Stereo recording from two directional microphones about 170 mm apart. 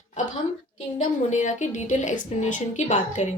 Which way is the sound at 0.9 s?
45° left (ahead or behind).